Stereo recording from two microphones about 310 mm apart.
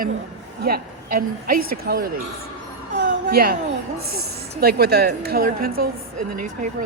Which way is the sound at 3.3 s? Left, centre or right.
Right.